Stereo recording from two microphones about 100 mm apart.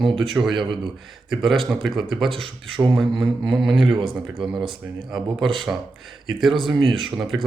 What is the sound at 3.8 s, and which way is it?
Speech, 60° right (ahead or behind).